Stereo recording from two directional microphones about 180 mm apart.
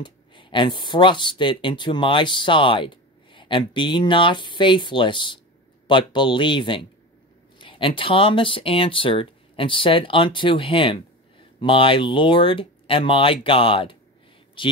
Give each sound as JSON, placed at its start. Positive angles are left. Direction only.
{"t": 0.0, "sound": "speech", "side_deg": 25}